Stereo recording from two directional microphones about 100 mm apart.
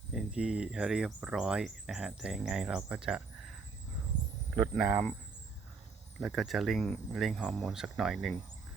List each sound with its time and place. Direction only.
0.1 s speech: 5° right (ahead or behind)
4.8 s speech: 15° right (ahead or behind)
6.1 s speech: centre (ahead or behind)